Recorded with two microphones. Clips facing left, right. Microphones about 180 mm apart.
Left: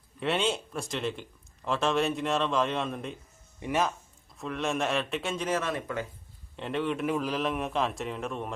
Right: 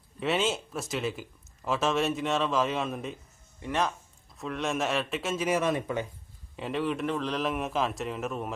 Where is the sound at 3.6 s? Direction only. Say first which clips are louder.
Left 2 dB; 15° left (ahead or behind).